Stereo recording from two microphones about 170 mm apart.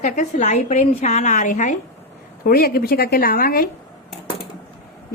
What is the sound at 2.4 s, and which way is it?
A woman's voice, 60° left (ahead or behind).